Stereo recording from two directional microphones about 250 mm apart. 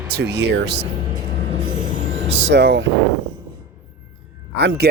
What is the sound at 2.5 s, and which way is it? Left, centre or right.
Speech, right.